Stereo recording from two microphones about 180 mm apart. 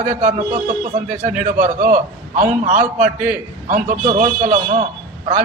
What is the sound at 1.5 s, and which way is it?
A man's voice, 45° right (ahead or behind).